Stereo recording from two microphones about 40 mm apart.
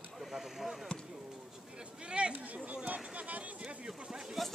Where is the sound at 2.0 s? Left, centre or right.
Right.